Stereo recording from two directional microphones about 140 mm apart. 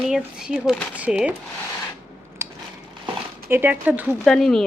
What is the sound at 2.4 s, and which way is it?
Biting, 20° right (ahead or behind).